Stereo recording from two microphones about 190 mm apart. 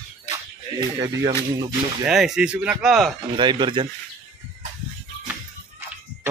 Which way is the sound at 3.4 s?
25° right (ahead or behind).